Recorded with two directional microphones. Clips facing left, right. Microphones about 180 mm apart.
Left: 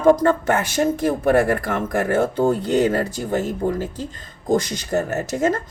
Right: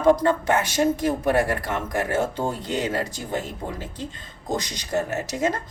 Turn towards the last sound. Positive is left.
turn(degrees=45)  # may be behind; listen again after turning